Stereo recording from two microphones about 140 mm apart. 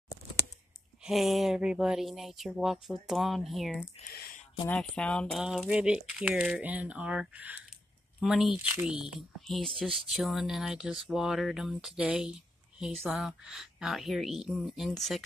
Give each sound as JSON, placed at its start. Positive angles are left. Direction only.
{"t": 1.0, "sound": "speech", "side_deg": 0}
{"t": 4.1, "sound": "speech", "side_deg": 90}
{"t": 4.6, "sound": "speech", "side_deg": 10}